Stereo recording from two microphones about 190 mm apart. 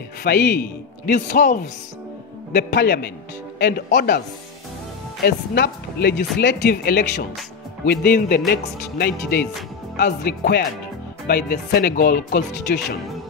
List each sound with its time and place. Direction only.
0.2 s speech: 55° left (ahead or behind)
2.5 s speech: 60° left (ahead or behind)
5.2 s speech: 55° left (ahead or behind)